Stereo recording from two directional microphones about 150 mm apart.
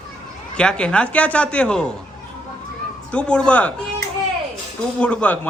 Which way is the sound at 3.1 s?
5° left (ahead or behind).